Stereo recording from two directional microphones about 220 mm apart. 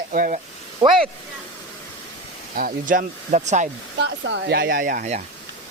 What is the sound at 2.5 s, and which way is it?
Speech, 40° right (ahead or behind).